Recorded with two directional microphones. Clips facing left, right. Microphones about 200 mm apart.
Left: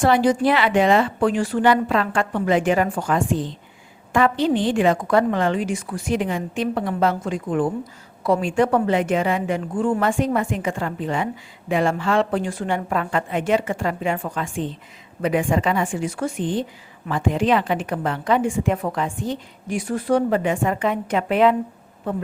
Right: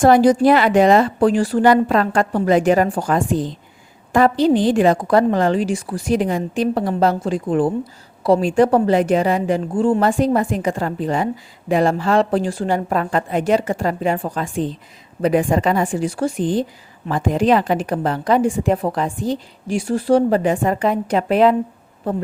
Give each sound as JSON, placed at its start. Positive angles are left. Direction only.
{"t": 0.0, "sound": "a woman's voice", "side_deg": -40}